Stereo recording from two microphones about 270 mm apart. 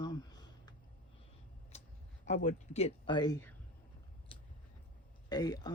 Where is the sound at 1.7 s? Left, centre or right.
Left.